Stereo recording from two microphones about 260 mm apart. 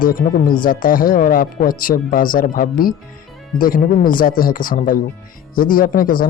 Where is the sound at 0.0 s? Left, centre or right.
Left.